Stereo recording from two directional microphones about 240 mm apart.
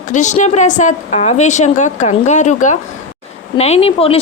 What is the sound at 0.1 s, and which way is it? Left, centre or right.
A woman's voice, left.